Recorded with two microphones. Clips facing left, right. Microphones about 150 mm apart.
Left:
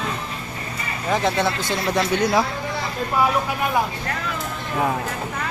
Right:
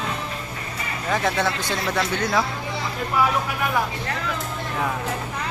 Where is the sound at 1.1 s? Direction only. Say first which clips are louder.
Left 2 dB; 15° left (ahead or behind).